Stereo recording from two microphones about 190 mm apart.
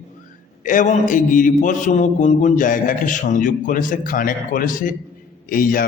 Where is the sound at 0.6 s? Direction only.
45° left (ahead or behind).